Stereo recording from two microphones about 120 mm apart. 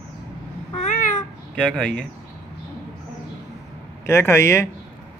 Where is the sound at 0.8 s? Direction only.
90° left.